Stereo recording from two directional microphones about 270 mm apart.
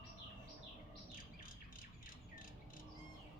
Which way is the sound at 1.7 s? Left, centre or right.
Left.